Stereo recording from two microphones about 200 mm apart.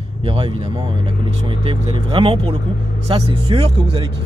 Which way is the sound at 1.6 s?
25° right (ahead or behind).